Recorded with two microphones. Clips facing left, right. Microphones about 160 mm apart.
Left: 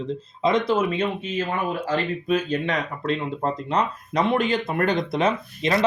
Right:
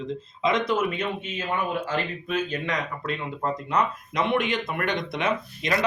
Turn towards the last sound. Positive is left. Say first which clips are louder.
# left 3 dB
turn(degrees=30)  # may be behind; listen again after turning